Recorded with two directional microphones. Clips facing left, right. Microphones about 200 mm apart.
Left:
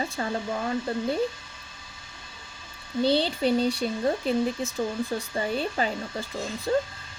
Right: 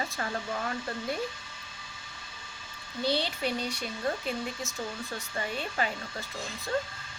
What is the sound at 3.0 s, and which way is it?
Speech, 30° left (ahead or behind).